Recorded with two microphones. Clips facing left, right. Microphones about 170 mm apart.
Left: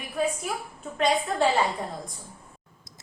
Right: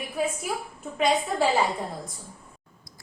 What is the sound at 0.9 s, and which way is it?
Speech, 5° right (ahead or behind).